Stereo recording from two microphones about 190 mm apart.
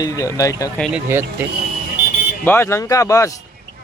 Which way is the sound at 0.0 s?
15° left (ahead or behind).